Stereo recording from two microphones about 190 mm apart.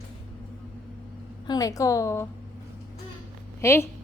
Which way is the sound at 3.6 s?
15° left (ahead or behind).